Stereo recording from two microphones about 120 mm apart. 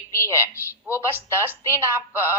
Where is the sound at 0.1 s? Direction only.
20° left (ahead or behind).